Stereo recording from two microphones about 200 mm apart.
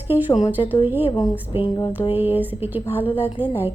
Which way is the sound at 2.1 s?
10° right (ahead or behind).